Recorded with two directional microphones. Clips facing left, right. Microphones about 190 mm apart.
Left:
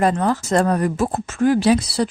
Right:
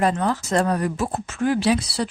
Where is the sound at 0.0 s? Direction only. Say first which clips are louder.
Left 3 dB; 45° left (ahead or behind).